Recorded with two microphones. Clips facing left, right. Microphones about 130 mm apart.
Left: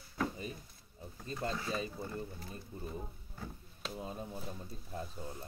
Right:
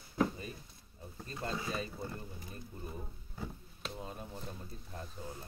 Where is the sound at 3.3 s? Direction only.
Centre (ahead or behind).